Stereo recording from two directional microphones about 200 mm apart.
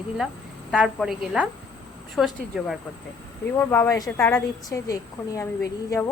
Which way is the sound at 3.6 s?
10° left (ahead or behind).